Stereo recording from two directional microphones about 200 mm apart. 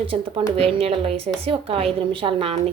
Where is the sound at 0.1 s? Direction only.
30° right (ahead or behind).